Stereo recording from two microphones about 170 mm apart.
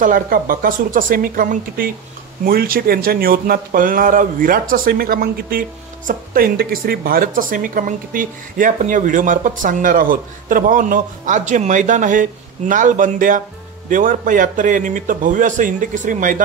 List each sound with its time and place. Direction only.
0.0 s a man's voice: 55° right (ahead or behind)